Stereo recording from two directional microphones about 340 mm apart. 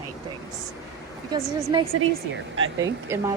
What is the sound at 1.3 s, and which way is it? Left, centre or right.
A woman's voice, centre.